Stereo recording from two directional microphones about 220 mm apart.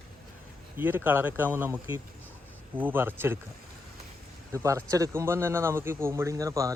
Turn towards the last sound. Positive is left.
turn(degrees=-15)  # may be behind; listen again after turning